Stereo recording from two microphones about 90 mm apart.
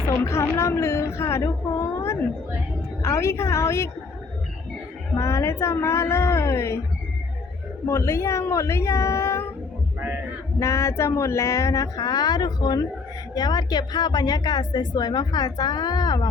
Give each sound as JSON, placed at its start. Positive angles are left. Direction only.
{"t": 0.3, "sound": "speech", "side_deg": 35}
{"t": 5.1, "sound": "speech", "side_deg": 30}
{"t": 7.9, "sound": "speech", "side_deg": 35}
{"t": 10.6, "sound": "a woman's voice", "side_deg": 35}